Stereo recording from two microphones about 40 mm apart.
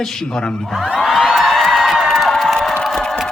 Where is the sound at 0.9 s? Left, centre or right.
Centre.